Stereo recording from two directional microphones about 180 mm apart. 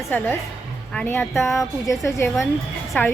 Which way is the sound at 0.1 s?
10° left (ahead or behind).